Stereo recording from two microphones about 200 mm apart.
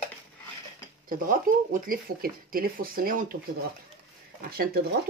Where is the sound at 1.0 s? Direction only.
45° right (ahead or behind).